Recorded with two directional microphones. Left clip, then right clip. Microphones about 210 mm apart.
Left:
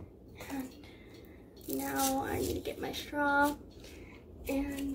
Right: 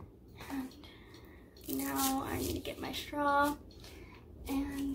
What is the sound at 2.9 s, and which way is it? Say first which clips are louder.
Speech: even; 5° right (ahead or behind).